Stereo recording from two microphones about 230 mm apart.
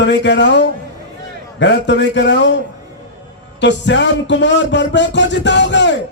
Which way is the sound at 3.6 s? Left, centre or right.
Left.